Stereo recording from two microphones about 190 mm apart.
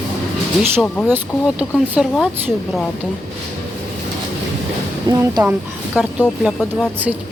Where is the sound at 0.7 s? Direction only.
5° left (ahead or behind).